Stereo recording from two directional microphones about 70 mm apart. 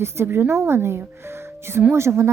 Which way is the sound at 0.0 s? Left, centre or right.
Right.